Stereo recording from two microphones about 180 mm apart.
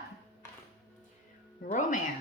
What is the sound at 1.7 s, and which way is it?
Speech, 45° left (ahead or behind).